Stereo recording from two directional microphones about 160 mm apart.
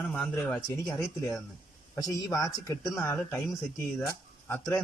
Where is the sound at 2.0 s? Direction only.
20° left (ahead or behind).